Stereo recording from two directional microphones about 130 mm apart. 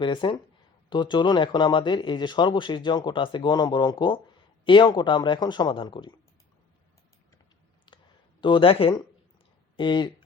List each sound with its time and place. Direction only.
0.0 s speech: 40° left (ahead or behind)
7.9 s clicking: 40° left (ahead or behind)
8.4 s speech: 40° left (ahead or behind)